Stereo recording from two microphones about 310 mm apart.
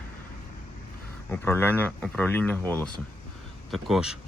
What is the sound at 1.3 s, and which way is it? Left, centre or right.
Speech, centre.